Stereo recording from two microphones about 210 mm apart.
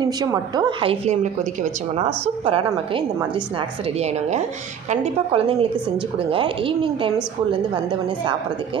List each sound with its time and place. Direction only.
0.0 s a woman's voice: 20° right (ahead or behind)
4.8 s a woman's voice: 30° right (ahead or behind)